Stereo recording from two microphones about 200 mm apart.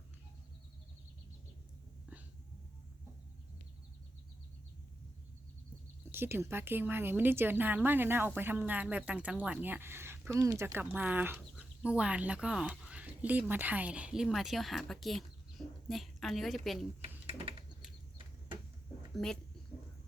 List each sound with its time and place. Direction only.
6.1 s a woman's voice: 10° right (ahead or behind)
17.0 s typing: 30° right (ahead or behind)
19.1 s speech: 5° left (ahead or behind)